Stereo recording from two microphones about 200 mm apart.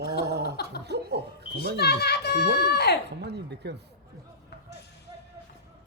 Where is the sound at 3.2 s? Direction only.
55° right (ahead or behind).